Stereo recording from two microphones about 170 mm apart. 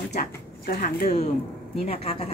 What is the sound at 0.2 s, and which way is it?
Speech, 60° left (ahead or behind).